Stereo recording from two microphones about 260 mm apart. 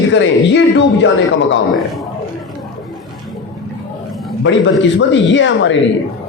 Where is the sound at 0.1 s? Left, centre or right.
Left.